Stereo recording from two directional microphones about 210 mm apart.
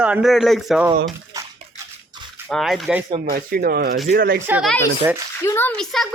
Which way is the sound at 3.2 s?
45° right (ahead or behind).